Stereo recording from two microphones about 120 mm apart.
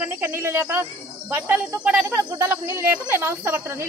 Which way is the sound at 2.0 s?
25° right (ahead or behind).